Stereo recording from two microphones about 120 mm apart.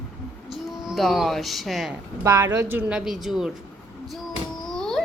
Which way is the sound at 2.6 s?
15° right (ahead or behind).